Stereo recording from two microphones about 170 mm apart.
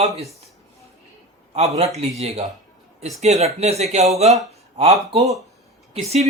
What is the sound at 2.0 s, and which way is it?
Speech, 40° right (ahead or behind).